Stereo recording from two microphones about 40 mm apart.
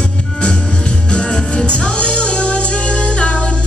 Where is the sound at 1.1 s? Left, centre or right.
Left.